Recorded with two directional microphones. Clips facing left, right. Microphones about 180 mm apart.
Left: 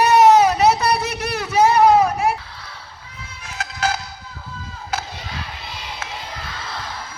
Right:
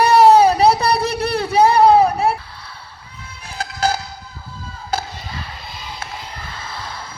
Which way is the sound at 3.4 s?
35° right (ahead or behind).